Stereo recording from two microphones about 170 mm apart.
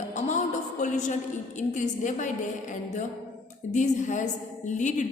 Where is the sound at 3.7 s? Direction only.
45° left (ahead or behind).